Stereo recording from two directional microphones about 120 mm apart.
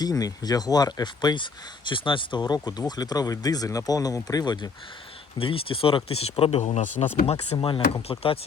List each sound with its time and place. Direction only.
0.0 s speech: 30° left (ahead or behind)
5.4 s speech: 50° left (ahead or behind); by 7.0 s 75° left (ahead or behind)
7.5 s speech: 45° left (ahead or behind)